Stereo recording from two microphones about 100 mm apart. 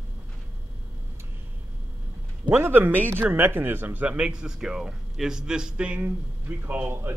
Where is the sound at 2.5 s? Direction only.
20° right (ahead or behind).